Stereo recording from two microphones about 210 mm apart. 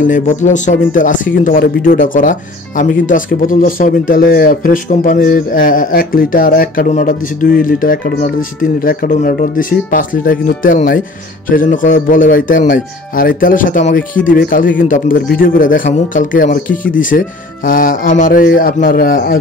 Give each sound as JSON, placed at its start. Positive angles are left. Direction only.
{"t": 0.0, "sound": "speech", "side_deg": 35}